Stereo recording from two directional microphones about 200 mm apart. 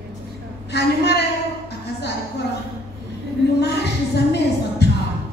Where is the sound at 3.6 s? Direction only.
55° left (ahead or behind).